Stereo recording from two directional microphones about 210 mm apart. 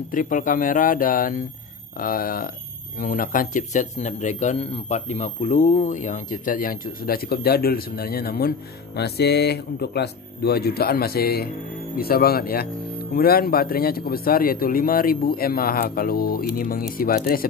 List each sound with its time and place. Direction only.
0.1 s a man's voice: 40° left (ahead or behind)